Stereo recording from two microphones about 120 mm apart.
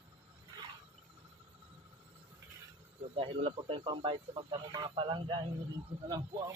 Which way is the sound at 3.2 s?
50° right (ahead or behind).